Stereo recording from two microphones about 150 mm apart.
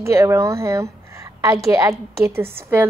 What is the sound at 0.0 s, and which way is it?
A woman's voice, 20° right (ahead or behind).